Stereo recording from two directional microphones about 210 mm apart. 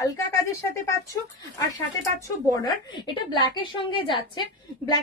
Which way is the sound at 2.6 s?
20° left (ahead or behind).